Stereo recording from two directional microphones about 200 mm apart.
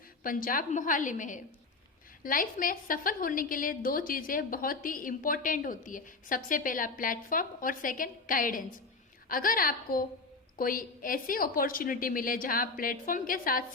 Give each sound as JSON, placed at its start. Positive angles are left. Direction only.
{"t": 0.2, "sound": "a woman's voice", "side_deg": 45}